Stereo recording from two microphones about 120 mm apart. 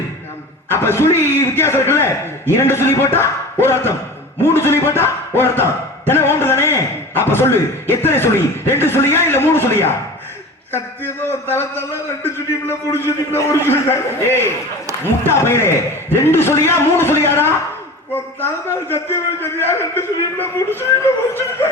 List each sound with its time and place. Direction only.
0.7 s a man's voice: 20° left (ahead or behind)